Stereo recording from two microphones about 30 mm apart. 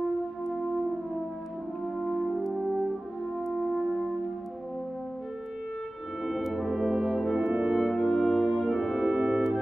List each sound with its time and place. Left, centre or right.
2.2 s music: centre
6.2 s brass instrument: centre
9.0 s music: centre